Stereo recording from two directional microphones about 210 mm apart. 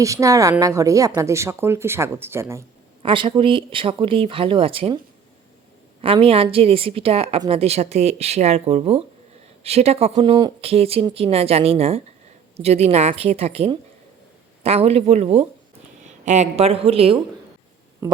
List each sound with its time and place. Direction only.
0.0 s speech: 15° right (ahead or behind)
3.0 s a woman's voice: 25° right (ahead or behind)
6.0 s a woman's voice: 25° right (ahead or behind)
18.0 s speech: 15° right (ahead or behind)